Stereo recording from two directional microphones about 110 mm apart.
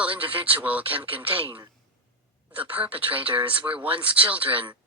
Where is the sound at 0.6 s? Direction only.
15° right (ahead or behind).